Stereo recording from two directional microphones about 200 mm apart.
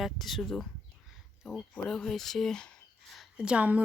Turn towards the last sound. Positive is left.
turn(degrees=-5)  # may be behind; listen again after turning